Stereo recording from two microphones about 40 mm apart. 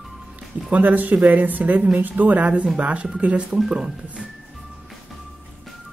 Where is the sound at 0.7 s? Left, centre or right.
Right.